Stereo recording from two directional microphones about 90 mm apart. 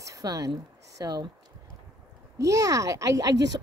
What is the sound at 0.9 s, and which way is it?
Speech, 45° right (ahead or behind).